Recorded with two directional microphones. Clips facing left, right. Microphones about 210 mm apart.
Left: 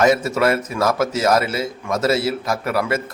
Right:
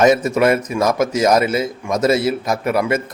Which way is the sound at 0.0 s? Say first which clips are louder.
Right 3 dB; 20° right (ahead or behind).